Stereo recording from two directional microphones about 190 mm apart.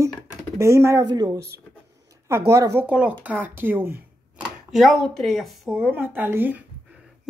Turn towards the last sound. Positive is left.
turn(degrees=-10)  # may be behind; listen again after turning